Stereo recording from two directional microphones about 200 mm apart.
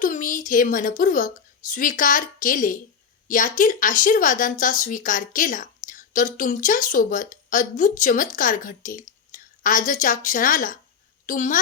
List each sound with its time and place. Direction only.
0.0 s a woman's voice: 40° left (ahead or behind)